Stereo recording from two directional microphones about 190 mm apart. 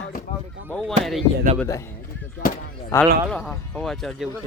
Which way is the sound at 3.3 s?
5° left (ahead or behind).